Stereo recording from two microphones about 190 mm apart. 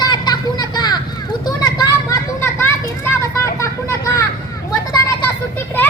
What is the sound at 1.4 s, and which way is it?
Children playing, 20° left (ahead or behind).